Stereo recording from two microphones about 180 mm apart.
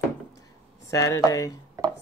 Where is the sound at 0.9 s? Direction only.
20° left (ahead or behind).